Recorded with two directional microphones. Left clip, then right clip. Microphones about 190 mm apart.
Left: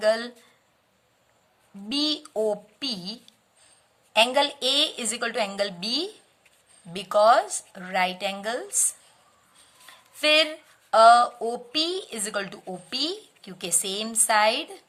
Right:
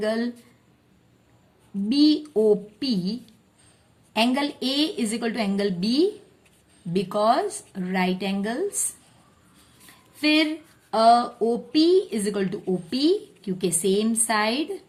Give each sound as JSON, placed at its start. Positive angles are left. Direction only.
{"t": 0.0, "sound": "a woman's voice", "side_deg": 35}
{"t": 1.9, "sound": "a woman's voice", "side_deg": 35}
{"t": 9.8, "sound": "a sound", "side_deg": 35}
{"t": 10.9, "sound": "a woman's voice", "side_deg": 35}